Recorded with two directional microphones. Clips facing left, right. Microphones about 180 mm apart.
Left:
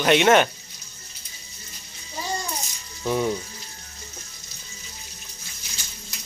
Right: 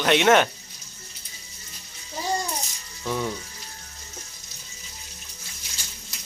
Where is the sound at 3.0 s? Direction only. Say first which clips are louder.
Left 4 dB; 15° left (ahead or behind).